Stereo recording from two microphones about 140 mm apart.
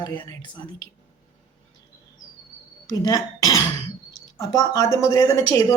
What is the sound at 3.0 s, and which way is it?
Speech, 25° left (ahead or behind).